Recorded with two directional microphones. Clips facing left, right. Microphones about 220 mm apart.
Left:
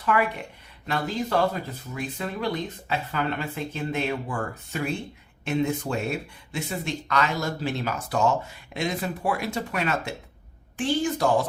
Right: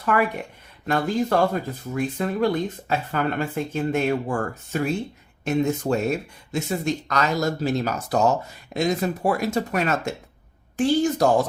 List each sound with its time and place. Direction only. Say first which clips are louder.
0.0 s speech: right 2 dB; 50° right (ahead or behind)